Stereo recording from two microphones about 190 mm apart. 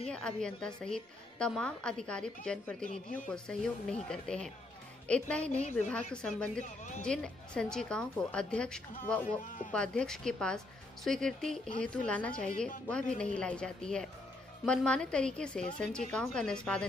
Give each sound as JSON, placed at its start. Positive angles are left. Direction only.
{"t": 0.0, "sound": "a woman's voice", "side_deg": 5}
{"t": 9.2, "sound": "a man's voice", "side_deg": 45}
{"t": 9.7, "sound": "a woman's voice", "side_deg": 5}